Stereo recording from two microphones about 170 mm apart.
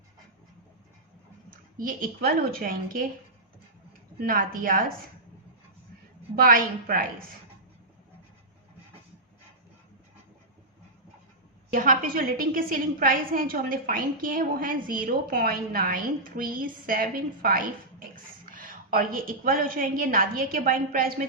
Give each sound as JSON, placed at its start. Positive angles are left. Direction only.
{"t": 1.5, "sound": "a woman's voice", "side_deg": -55}
{"t": 4.2, "sound": "a woman's voice", "side_deg": -60}
{"t": 6.3, "sound": "a woman's voice", "side_deg": -55}
{"t": 11.7, "sound": "a woman's voice", "side_deg": -55}